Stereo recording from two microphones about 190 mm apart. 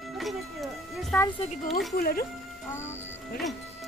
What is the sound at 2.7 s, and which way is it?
Speech, 15° left (ahead or behind).